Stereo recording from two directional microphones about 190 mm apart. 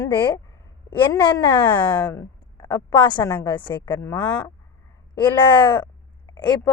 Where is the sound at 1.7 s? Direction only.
10° left (ahead or behind).